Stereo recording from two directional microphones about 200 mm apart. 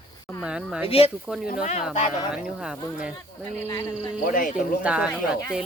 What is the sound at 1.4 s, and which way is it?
Speech, 40° left (ahead or behind).